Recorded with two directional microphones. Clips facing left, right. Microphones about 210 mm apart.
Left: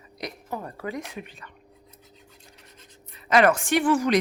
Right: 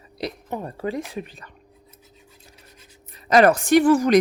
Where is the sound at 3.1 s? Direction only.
40° right (ahead or behind).